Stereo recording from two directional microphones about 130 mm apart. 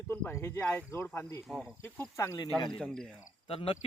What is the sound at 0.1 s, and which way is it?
Speech, 20° left (ahead or behind).